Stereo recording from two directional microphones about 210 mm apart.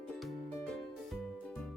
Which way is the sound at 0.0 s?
Centre (ahead or behind).